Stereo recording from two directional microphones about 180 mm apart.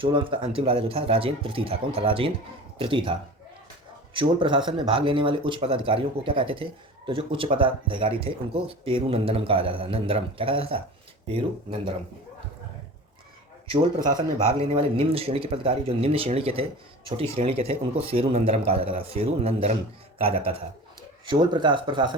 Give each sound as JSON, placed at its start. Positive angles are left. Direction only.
{"t": 0.0, "sound": "speech", "side_deg": -30}
{"t": 14.2, "sound": "speech", "side_deg": -30}